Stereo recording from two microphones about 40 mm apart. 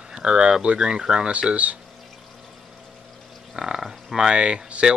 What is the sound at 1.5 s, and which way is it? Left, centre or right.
Speech, right.